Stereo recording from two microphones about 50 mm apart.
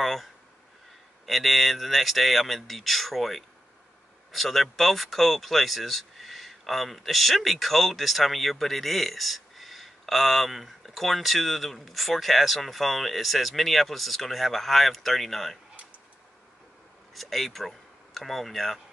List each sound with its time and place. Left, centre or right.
0.0 s speech: centre
17.1 s speech: centre